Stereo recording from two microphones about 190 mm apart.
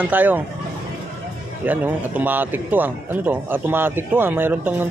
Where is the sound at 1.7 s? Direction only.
10° right (ahead or behind).